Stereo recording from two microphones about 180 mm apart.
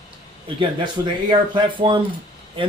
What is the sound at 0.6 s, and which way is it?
Speech, 25° right (ahead or behind).